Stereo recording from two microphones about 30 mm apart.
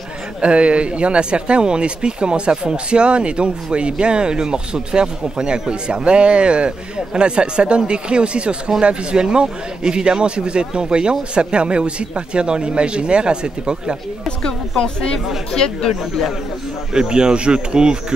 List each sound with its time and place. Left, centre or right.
0.4 s a man's voice: right
15.5 s speech: left
16.9 s a man's voice: right